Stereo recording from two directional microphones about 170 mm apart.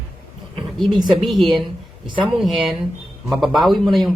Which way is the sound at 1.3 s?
Centre (ahead or behind).